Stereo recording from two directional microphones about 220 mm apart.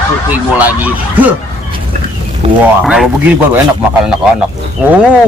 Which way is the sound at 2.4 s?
25° right (ahead or behind).